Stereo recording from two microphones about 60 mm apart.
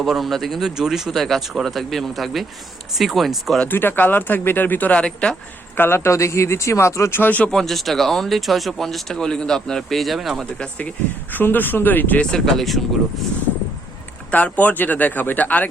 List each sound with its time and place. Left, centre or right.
0.0 s speech: centre
3.7 s speech: left; by 5.4 s centre
5.7 s speech: left
7.2 s speech: left
7.5 s speech: centre
10.8 s speech: left
12.2 s speech: centre
14.3 s speech: left